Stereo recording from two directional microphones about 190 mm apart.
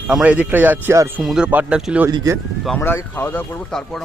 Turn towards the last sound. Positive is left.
turn(degrees=5)  # may be behind; listen again after turning